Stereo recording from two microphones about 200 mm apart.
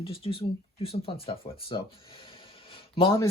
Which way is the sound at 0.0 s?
30° left (ahead or behind).